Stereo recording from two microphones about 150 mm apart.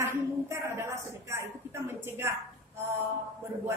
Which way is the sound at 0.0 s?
20° right (ahead or behind).